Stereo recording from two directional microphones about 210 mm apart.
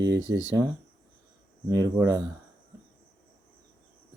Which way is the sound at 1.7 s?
15° right (ahead or behind).